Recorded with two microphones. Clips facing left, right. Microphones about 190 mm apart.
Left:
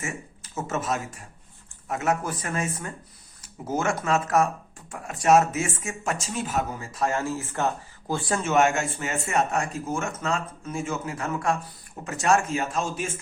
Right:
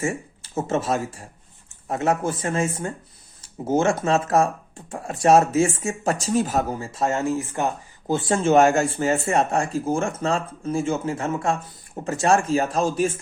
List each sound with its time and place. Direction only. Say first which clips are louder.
0.0 s speech: right 8 dB; 30° right (ahead or behind)